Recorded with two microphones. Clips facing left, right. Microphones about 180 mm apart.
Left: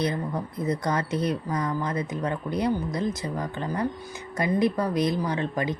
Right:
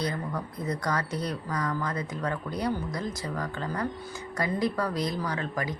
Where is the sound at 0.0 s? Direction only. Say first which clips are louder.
Left 4 dB; 20° left (ahead or behind).